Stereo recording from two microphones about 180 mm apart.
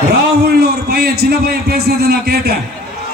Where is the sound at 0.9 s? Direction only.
60° right (ahead or behind).